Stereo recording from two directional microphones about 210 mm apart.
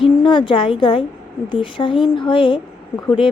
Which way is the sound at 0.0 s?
25° left (ahead or behind).